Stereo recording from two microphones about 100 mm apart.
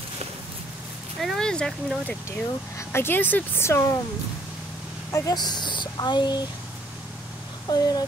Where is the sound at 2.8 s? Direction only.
25° left (ahead or behind).